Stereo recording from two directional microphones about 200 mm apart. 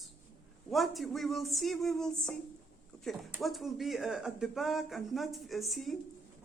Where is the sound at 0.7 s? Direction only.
Centre (ahead or behind).